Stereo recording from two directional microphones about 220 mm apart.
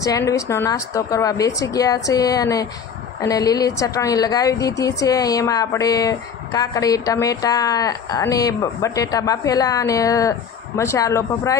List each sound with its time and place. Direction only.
0.0 s a woman's voice: 15° left (ahead or behind)